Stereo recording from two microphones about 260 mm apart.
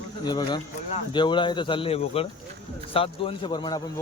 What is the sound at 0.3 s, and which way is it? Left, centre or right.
A man's voice, centre.